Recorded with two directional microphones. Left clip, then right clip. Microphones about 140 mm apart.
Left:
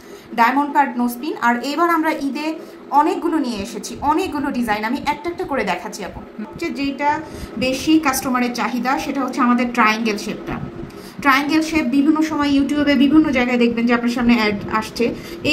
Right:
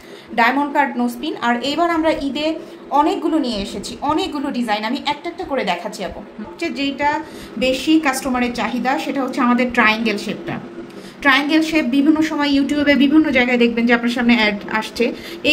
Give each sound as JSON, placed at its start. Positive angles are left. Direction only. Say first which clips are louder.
{"t": 0.4, "sound": "a woman's voice", "louder": "even", "side_deg": -20}
{"t": 2.9, "sound": "a woman's voice", "louder": "even", "side_deg": -25}
{"t": 11.2, "sound": "a woman's voice", "louder": "right 1 dB", "side_deg": -25}